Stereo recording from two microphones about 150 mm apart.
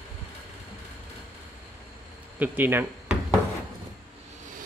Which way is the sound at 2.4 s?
10° right (ahead or behind).